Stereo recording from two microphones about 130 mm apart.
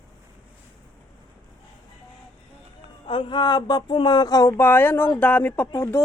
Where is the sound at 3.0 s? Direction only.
40° left (ahead or behind); by 6.0 s 20° left (ahead or behind).